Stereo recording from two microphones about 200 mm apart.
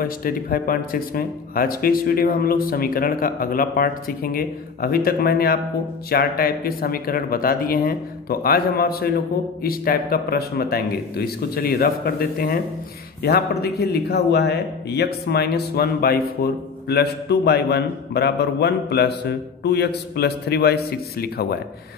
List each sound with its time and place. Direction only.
0.0 s a man's voice: 45° left (ahead or behind)